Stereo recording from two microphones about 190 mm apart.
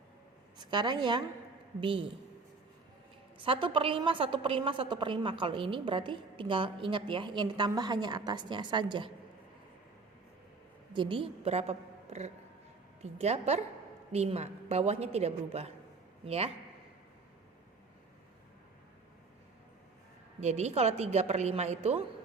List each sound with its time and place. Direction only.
0.6 s a woman's voice: 25° right (ahead or behind)
3.3 s a woman's voice: 25° right (ahead or behind)
10.9 s a woman's voice: 25° right (ahead or behind)
20.4 s a woman's voice: 35° right (ahead or behind)